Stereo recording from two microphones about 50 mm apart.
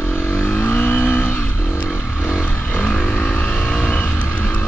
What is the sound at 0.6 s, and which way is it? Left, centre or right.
Vehicle, left.